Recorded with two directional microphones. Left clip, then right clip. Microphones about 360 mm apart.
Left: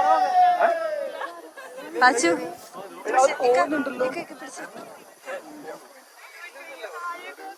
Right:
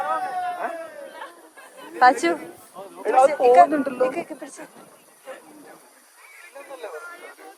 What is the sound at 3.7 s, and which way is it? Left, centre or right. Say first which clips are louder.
Speech: right 2 dB; right.